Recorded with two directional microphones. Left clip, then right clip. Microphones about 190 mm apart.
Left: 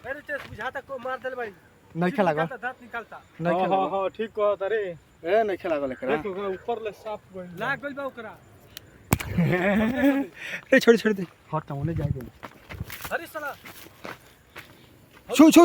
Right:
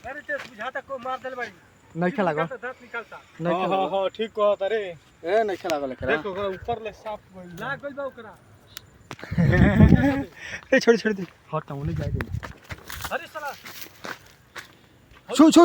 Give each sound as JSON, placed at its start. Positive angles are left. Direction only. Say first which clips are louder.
{"t": 0.0, "sound": "a sound", "louder": "right 1 dB", "side_deg": 55}
{"t": 0.5, "sound": "speech", "louder": "right 1 dB", "side_deg": 55}
{"t": 2.0, "sound": "speech", "louder": "even", "side_deg": -5}
{"t": 2.5, "sound": "speech", "louder": "even", "side_deg": 50}
{"t": 3.5, "sound": "speech", "louder": "even", "side_deg": -30}
{"t": 5.2, "sound": "speech", "louder": "even", "side_deg": -15}
{"t": 7.6, "sound": "speech", "louder": "left 1 dB", "side_deg": 55}
{"t": 8.8, "sound": "a sound", "louder": "right 2 dB", "side_deg": -20}
{"t": 9.4, "sound": "speech", "louder": "right 4 dB", "side_deg": -10}
{"t": 10.0, "sound": "speech", "louder": "left 1 dB", "side_deg": 15}
{"t": 11.9, "sound": "speech", "louder": "right 2 dB", "side_deg": -55}
{"t": 13.1, "sound": "a sound", "louder": "even", "side_deg": 25}
{"t": 13.5, "sound": "dog", "louder": "right 2 dB", "side_deg": -55}
{"t": 15.3, "sound": "speech", "louder": "even", "side_deg": 0}